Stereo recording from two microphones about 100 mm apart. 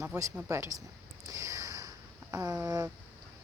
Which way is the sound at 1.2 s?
35° right (ahead or behind).